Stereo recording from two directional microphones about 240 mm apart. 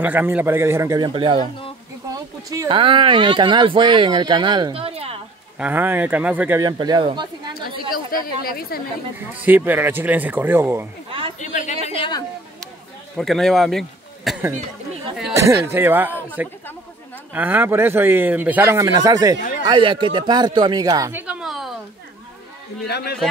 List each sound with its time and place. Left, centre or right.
0.0 s speech: centre
2.5 s speech: centre
5.6 s speech: centre
7.9 s speech: left
9.3 s speech: centre
11.1 s chatter: right
11.3 s a sound: left
13.2 s a man's voice: centre
15.6 s speech: centre
22.8 s speech: left